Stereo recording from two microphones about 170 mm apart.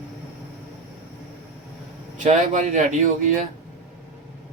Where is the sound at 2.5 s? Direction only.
45° right (ahead or behind).